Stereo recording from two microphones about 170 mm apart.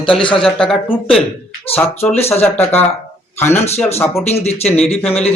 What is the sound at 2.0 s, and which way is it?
Speech, 35° left (ahead or behind).